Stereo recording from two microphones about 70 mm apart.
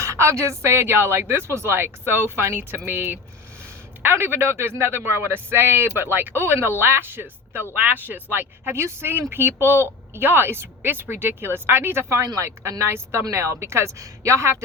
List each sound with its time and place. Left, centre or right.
0.0 s speech: right